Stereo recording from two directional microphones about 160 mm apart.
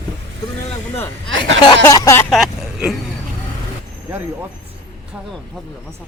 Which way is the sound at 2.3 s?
Centre (ahead or behind).